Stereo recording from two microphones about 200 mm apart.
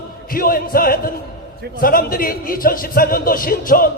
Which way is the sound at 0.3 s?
45° left (ahead or behind).